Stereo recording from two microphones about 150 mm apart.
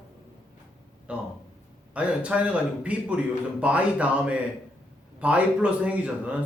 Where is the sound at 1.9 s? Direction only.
10° right (ahead or behind).